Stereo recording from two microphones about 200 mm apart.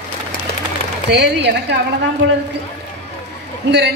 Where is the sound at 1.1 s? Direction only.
55° right (ahead or behind).